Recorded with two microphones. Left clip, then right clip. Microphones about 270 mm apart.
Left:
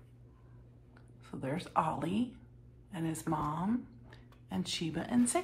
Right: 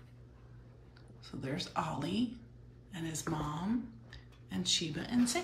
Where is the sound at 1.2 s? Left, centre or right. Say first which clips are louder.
Left 1 dB; centre.